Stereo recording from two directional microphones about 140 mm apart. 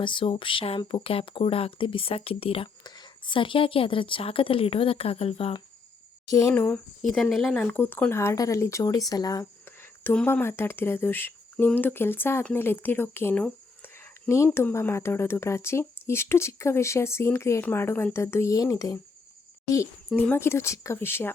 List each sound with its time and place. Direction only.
0.0 s a woman's voice: 35° left (ahead or behind)
2.8 s a woman's voice: 30° left (ahead or behind)
6.5 s speech: 10° left (ahead or behind)
9.6 s speech: 15° left (ahead or behind)
20.1 s speech: 10° left (ahead or behind)